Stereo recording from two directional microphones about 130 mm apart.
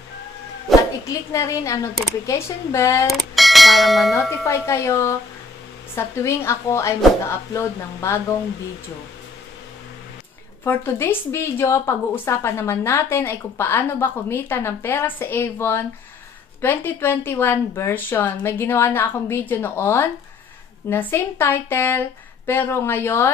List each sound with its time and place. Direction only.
0.7 s dog: centre (ahead or behind)
1.0 s a woman's voice: 25° left (ahead or behind)
3.1 s speech: centre (ahead or behind)
4.5 s a woman's voice: 20° left (ahead or behind)
10.6 s speech: 15° left (ahead or behind)